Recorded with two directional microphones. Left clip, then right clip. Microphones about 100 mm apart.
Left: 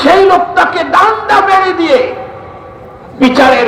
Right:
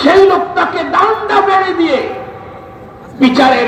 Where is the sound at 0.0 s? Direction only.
35° left (ahead or behind).